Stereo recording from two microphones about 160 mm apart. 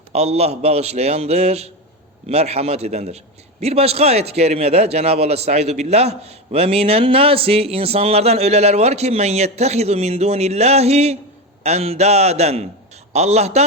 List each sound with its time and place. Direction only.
0.1 s a man's voice: 40° right (ahead or behind)